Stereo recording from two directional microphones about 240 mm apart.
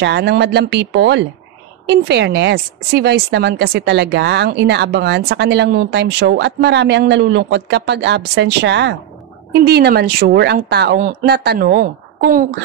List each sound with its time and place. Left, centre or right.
0.0 s speech: right